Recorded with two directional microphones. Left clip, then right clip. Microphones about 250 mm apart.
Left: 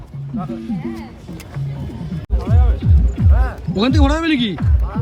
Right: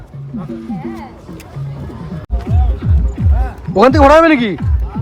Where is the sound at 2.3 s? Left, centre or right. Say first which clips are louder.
Left 1 dB; centre.